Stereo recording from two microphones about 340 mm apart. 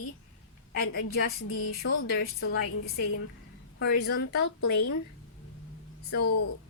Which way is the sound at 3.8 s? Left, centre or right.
Left.